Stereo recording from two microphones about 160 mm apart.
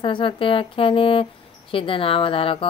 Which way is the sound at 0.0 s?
30° left (ahead or behind).